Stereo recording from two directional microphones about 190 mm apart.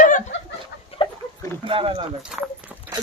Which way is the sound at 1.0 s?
30° left (ahead or behind).